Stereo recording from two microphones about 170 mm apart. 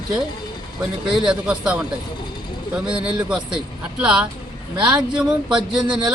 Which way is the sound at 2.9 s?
30° right (ahead or behind).